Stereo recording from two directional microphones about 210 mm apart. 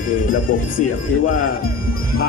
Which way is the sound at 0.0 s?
40° left (ahead or behind).